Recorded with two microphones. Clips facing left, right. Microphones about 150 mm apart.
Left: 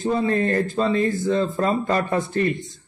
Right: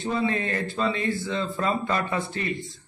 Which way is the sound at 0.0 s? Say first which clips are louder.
Left 5 dB; 40° left (ahead or behind).